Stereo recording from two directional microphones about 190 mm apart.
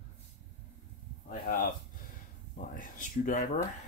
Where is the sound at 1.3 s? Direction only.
50° left (ahead or behind).